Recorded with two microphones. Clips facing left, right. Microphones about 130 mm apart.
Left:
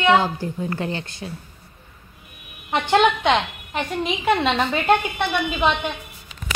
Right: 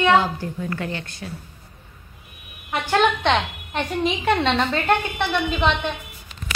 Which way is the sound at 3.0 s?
5° left (ahead or behind).